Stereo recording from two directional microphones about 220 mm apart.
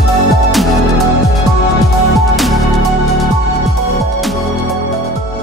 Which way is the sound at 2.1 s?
Centre (ahead or behind).